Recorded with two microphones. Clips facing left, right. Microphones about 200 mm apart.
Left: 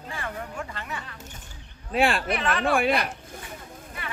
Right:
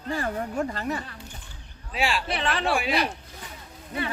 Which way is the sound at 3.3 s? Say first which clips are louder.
Left 3 dB; 50° left (ahead or behind).